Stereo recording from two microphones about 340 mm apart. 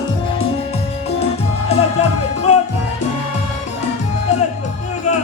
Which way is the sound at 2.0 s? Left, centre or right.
Left.